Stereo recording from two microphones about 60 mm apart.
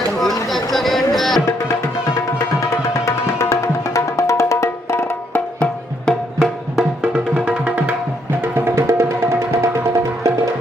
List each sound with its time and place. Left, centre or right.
0.2 s chatter: centre
3.1 s music: left
6.1 s music: centre
6.4 s music: centre
7.4 s music: right
8.4 s music: right